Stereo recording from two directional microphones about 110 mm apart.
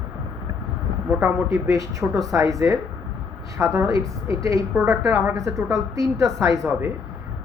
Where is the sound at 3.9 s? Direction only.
30° right (ahead or behind).